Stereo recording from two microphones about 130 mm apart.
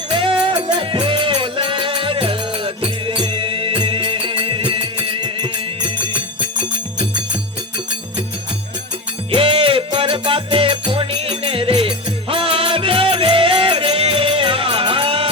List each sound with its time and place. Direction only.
0.1 s music: 40° right (ahead or behind)
9.3 s music: 40° right (ahead or behind)